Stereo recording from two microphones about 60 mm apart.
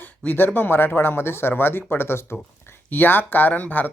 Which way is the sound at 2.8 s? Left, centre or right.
Left.